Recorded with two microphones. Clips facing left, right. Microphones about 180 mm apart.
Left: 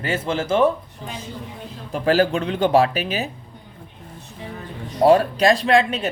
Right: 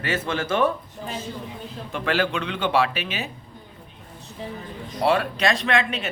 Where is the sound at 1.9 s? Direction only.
35° left (ahead or behind).